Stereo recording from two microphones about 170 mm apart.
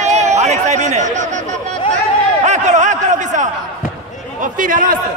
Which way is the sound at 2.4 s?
45° right (ahead or behind).